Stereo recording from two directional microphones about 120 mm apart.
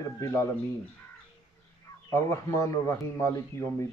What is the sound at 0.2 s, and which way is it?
Speech, 25° left (ahead or behind).